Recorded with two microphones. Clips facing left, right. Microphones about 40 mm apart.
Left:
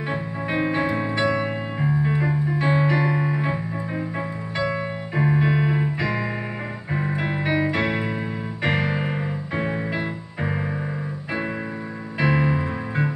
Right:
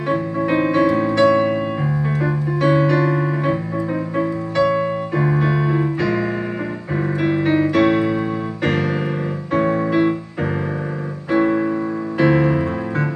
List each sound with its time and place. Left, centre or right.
0.7 s music: centre
2.6 s piano: centre
5.3 s keyboard: centre
5.9 s music: left
7.0 s music: centre
8.6 s keyboard: centre
9.5 s music: centre
11.3 s piano: right
12.2 s music: centre